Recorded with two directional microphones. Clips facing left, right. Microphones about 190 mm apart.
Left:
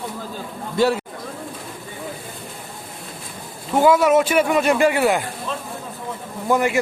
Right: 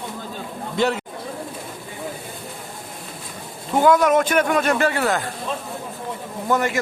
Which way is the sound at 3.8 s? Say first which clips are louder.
Left 1 dB; 5° left (ahead or behind).